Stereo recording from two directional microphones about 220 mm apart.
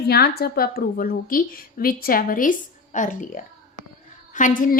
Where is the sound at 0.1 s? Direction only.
45° left (ahead or behind).